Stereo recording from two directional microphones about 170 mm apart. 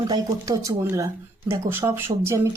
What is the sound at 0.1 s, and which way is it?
Speech, 20° right (ahead or behind).